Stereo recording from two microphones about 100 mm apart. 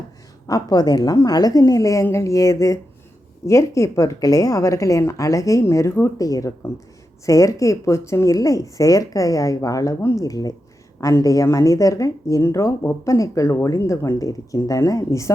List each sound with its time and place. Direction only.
0.4 s speech: 40° left (ahead or behind)